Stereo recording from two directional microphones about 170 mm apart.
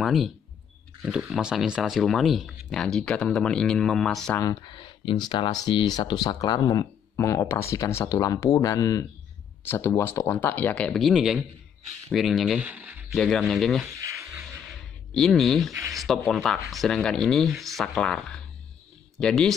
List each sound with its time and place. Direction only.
0.0 s speech: centre (ahead or behind)
4.4 s speech: 25° left (ahead or behind); by 13.2 s 10° right (ahead or behind)
13.2 s speech: centre (ahead or behind)
14.7 s a sound: centre (ahead or behind)
15.9 s speech: centre (ahead or behind)